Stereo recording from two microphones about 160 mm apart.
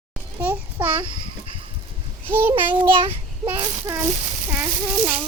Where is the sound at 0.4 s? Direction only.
10° right (ahead or behind).